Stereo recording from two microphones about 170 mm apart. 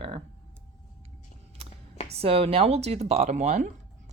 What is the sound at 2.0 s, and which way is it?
Speech, 35° right (ahead or behind).